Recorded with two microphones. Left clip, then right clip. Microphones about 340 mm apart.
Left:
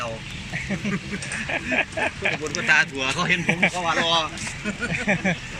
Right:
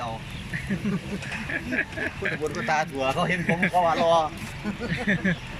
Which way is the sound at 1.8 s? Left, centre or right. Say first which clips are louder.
Left 4 dB; centre.